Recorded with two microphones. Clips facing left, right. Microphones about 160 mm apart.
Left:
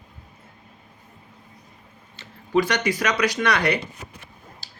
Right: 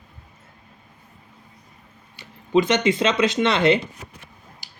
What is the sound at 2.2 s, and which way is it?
Speech, 20° right (ahead or behind).